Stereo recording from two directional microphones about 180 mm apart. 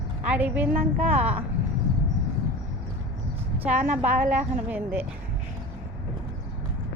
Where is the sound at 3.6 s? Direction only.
10° right (ahead or behind).